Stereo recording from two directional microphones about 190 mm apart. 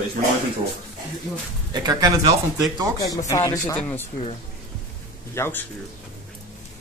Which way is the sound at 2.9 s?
20° left (ahead or behind).